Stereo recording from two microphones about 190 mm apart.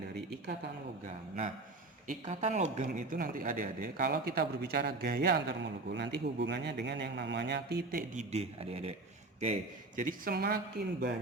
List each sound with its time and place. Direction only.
2.0 s speech: 40° right (ahead or behind)